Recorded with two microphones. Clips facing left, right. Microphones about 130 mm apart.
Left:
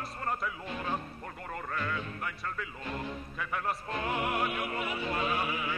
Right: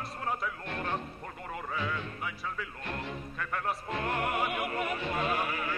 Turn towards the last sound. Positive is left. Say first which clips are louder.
# even
turn(degrees=0)  # may be behind; listen again after turning